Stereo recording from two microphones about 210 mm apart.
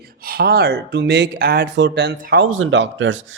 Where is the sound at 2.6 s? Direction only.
65° right (ahead or behind).